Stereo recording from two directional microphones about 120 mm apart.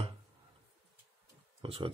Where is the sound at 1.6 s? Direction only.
45° right (ahead or behind).